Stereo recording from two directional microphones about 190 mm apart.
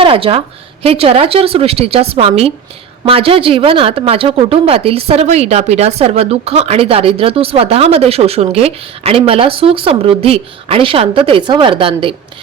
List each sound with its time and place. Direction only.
0.0 s a woman's voice: 30° right (ahead or behind)